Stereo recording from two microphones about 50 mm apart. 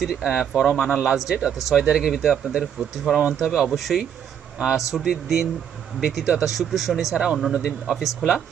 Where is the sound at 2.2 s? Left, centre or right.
Centre.